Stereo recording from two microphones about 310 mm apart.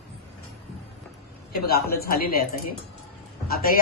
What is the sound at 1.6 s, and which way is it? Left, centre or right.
A man's voice, left.